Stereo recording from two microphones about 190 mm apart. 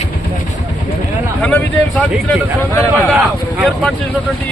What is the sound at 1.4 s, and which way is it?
Speech, 5° left (ahead or behind).